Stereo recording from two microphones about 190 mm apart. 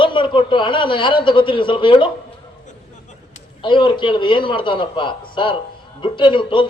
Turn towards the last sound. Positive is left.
turn(degrees=25)  # may be behind; listen again after turning